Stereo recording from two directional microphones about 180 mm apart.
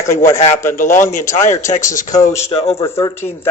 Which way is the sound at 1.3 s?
45° left (ahead or behind).